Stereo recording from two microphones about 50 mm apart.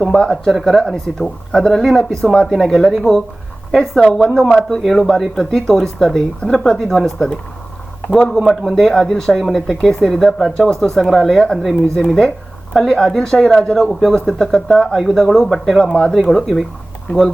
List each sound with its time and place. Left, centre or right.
0.0 s speech: centre
4.4 s speech: left
4.8 s speech: centre
8.3 s speech: centre
11.3 s speech: centre